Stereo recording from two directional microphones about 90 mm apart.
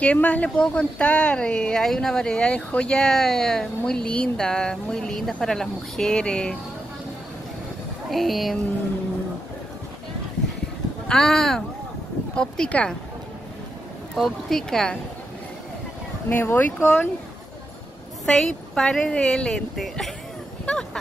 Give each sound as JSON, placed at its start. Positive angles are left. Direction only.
{"t": 0.0, "sound": "speech", "side_deg": 15}
{"t": 8.1, "sound": "speech", "side_deg": 0}
{"t": 11.1, "sound": "speech", "side_deg": 5}
{"t": 14.1, "sound": "speech", "side_deg": 5}
{"t": 16.3, "sound": "speech", "side_deg": 20}
{"t": 18.2, "sound": "speech", "side_deg": 5}